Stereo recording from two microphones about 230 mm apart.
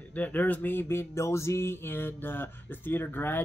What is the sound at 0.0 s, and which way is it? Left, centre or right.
Speech, centre.